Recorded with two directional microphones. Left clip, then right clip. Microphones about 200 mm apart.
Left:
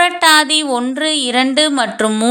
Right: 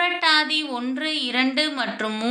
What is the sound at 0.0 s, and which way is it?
A woman's voice, 50° left (ahead or behind).